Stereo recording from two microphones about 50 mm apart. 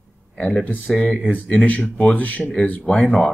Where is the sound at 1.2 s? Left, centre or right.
Left.